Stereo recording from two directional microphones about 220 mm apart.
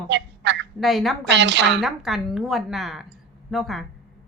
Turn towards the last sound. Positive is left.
turn(degrees=0)  # may be behind; listen again after turning